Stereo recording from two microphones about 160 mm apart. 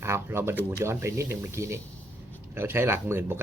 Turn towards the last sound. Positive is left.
turn(degrees=-15)  # may be behind; listen again after turning